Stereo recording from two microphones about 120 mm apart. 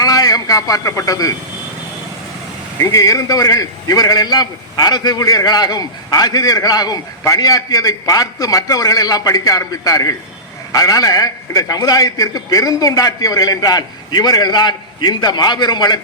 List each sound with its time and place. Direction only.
0.0 s a man's voice: 30° left (ahead or behind)
2.8 s a man's voice: 30° left (ahead or behind)